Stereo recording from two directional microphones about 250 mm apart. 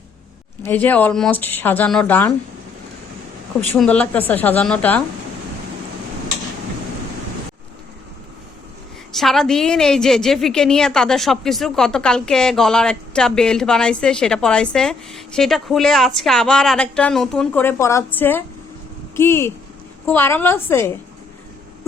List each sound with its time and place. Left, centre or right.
0.6 s speech: centre
3.7 s a woman's voice: centre
9.1 s a woman's voice: centre